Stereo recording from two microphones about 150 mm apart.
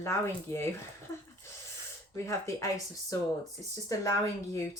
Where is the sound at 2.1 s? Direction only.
20° left (ahead or behind).